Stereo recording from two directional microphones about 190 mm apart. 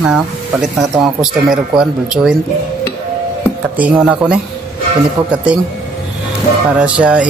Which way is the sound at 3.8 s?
5° right (ahead or behind).